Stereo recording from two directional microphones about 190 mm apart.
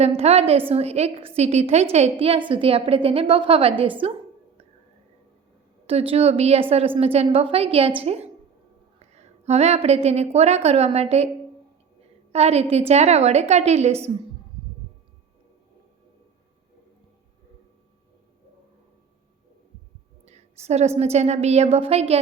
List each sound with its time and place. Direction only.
0.0 s a woman's voice: 35° right (ahead or behind)
5.8 s a woman's voice: 30° right (ahead or behind)
12.3 s a woman's voice: 35° right (ahead or behind)
20.2 s a woman's voice: 35° right (ahead or behind)